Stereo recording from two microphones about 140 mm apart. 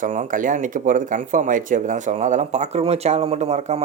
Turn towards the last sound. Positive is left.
turn(degrees=-50)  # may be behind; listen again after turning